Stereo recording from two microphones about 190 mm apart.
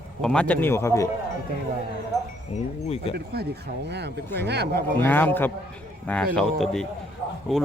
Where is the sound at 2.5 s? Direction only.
30° left (ahead or behind).